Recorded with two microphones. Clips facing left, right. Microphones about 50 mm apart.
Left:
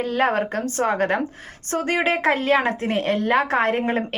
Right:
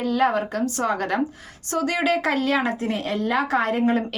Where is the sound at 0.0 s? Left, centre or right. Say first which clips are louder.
Even; left.